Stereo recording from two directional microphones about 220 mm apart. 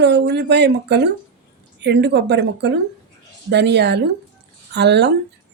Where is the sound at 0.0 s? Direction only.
50° right (ahead or behind).